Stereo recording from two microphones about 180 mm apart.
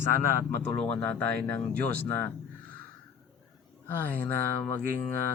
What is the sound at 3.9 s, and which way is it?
Speech, 10° left (ahead or behind).